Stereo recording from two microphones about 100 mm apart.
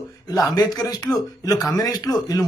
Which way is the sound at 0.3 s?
40° left (ahead or behind).